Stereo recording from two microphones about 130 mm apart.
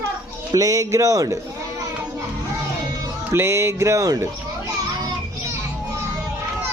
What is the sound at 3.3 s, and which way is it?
Speech, 20° right (ahead or behind).